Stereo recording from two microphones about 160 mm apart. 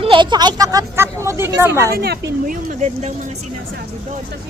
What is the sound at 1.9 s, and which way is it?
Speech, 75° right (ahead or behind).